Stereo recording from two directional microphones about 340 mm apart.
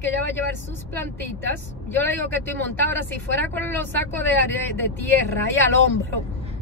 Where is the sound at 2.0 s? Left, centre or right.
Centre.